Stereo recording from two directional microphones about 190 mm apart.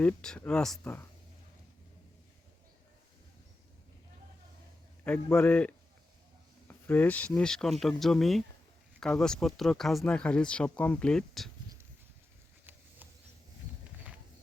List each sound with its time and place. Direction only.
0.0 s speech: 5° left (ahead or behind)
5.0 s a man's voice: 10° left (ahead or behind)